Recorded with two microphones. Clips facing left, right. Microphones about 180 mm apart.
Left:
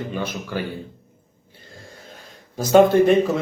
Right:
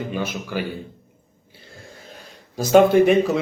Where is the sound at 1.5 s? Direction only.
10° right (ahead or behind).